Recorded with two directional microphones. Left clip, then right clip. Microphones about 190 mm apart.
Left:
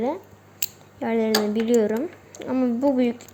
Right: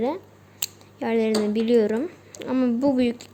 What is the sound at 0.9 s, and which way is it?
Speech, 25° right (ahead or behind).